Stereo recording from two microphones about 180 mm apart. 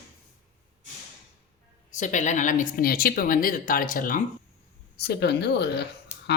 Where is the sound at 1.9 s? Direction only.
45° left (ahead or behind).